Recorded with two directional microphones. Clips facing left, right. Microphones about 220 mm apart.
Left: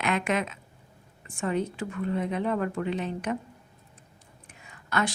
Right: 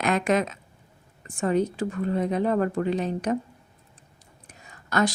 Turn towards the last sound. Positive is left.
turn(degrees=-40)  # may be behind; listen again after turning